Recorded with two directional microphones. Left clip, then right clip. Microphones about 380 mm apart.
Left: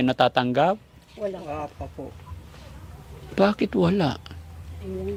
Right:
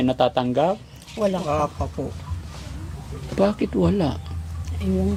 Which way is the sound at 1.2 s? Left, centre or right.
Right.